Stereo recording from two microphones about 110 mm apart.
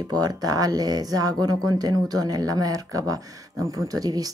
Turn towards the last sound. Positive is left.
turn(degrees=-35)  # may be behind; listen again after turning